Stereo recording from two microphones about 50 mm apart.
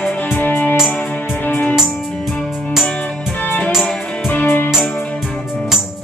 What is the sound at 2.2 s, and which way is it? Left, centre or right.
Music, centre.